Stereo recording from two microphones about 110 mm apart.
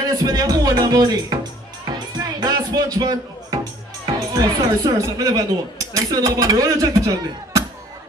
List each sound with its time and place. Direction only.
0.0 s speech: 35° right (ahead or behind)
2.1 s music: 35° right (ahead or behind)
4.0 s speech: 35° right (ahead or behind)